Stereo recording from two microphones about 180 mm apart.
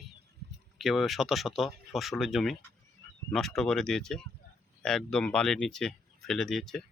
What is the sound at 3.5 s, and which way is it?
Speech, 5° left (ahead or behind).